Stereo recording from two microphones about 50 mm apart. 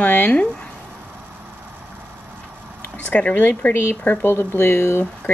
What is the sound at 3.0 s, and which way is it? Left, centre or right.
Speech, left.